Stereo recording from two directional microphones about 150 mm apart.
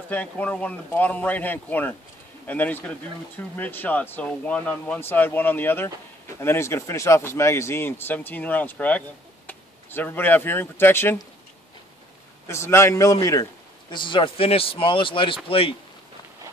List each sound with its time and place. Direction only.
0.1 s speech: 10° left (ahead or behind)
12.4 s a man's voice: 20° left (ahead or behind); by 15.7 s 40° left (ahead or behind)